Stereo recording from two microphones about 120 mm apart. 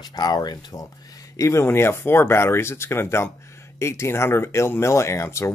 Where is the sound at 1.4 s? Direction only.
25° left (ahead or behind).